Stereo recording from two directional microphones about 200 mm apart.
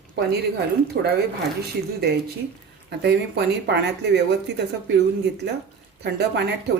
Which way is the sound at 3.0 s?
55° right (ahead or behind).